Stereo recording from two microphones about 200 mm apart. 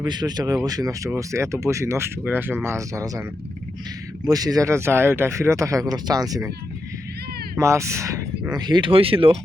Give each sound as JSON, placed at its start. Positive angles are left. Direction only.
{"t": 0.0, "sound": "speech", "side_deg": -20}
{"t": 4.3, "sound": "speech", "side_deg": -20}
{"t": 7.6, "sound": "speech", "side_deg": -15}